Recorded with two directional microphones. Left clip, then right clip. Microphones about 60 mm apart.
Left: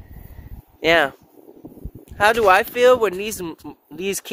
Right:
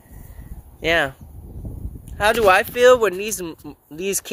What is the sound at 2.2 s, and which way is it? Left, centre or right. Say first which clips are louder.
Speech: left 1 dB; left.